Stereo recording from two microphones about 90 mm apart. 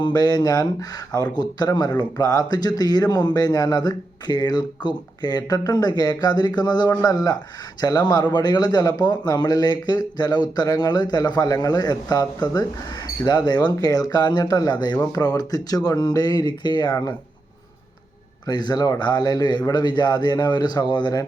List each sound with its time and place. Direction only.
0.0 s speech: 45° left (ahead or behind)
18.4 s speech: 50° left (ahead or behind)